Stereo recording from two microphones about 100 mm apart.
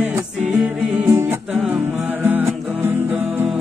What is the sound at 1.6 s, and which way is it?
Music, 15° right (ahead or behind).